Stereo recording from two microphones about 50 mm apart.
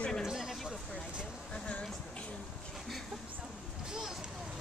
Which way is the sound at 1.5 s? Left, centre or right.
Left.